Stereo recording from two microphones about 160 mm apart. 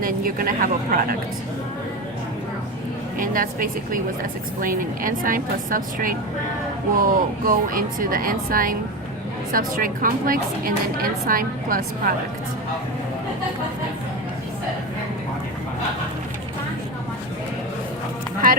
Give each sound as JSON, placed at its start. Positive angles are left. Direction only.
{"t": 0.0, "sound": "a woman's voice", "side_deg": -60}
{"t": 3.2, "sound": "a woman's voice", "side_deg": -60}